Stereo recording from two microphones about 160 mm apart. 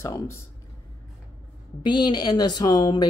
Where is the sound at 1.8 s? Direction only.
30° left (ahead or behind).